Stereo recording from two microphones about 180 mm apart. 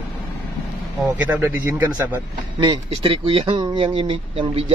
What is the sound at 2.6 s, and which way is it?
Speech, 25° right (ahead or behind).